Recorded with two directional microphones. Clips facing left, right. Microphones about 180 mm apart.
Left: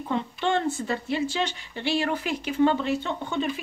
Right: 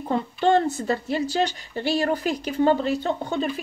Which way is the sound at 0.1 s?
40° right (ahead or behind).